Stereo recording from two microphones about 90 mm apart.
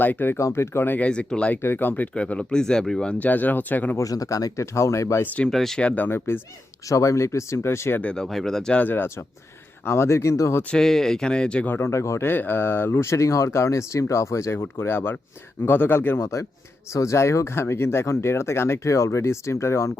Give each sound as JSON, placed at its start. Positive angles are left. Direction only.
{"t": 0.0, "sound": "speech", "side_deg": 20}
{"t": 0.3, "sound": "speech", "side_deg": 30}
{"t": 1.6, "sound": "speech", "side_deg": 25}
{"t": 3.9, "sound": "speech", "side_deg": 40}
{"t": 5.2, "sound": "speech", "side_deg": 15}
{"t": 5.5, "sound": "speech", "side_deg": 5}
{"t": 5.8, "sound": "speech", "side_deg": 20}
{"t": 6.8, "sound": "speech", "side_deg": 35}
{"t": 8.0, "sound": "speech", "side_deg": 10}
{"t": 10.6, "sound": "speech", "side_deg": 10}
{"t": 11.7, "sound": "speech", "side_deg": 30}